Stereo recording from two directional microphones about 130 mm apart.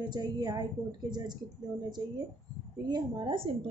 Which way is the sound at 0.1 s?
35° right (ahead or behind).